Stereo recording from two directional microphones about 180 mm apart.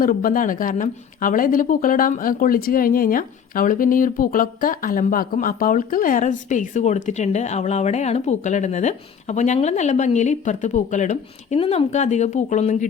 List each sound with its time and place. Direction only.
0.0 s a woman's voice: 50° left (ahead or behind)